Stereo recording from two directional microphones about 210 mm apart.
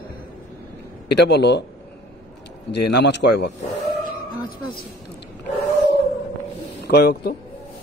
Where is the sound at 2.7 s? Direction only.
55° left (ahead or behind).